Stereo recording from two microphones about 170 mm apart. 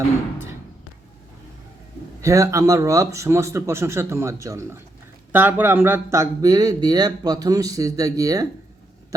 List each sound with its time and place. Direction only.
2.2 s a man's voice: 20° right (ahead or behind)